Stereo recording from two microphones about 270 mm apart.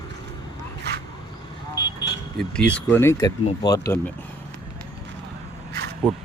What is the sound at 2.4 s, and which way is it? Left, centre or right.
Speech, centre.